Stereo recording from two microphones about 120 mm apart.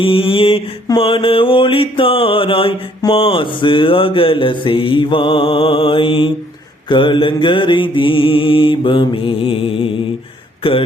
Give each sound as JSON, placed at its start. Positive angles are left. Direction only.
{"t": 0.0, "sound": "mantra", "side_deg": 50}
{"t": 10.6, "sound": "speech", "side_deg": 50}